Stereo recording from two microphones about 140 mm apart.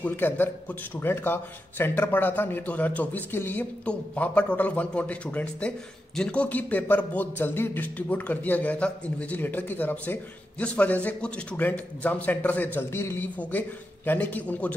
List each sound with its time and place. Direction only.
0.0 s a man's voice: 15° left (ahead or behind)